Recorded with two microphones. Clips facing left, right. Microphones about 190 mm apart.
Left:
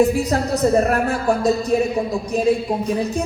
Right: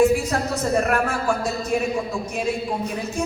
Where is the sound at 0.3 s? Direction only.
35° left (ahead or behind).